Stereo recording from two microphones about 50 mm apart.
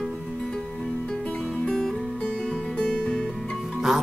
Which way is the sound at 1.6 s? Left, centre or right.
Centre.